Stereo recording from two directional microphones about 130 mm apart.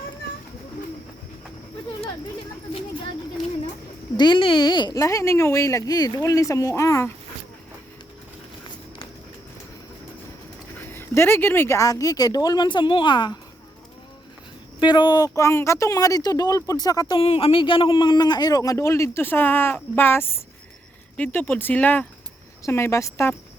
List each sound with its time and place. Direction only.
4.2 s a man's voice: 40° left (ahead or behind)
10.8 s a man's voice: 20° left (ahead or behind); by 13.4 s 35° left (ahead or behind)
14.8 s a man's voice: 35° left (ahead or behind)
17.2 s a man's voice: 45° left (ahead or behind); by 23.3 s 25° left (ahead or behind)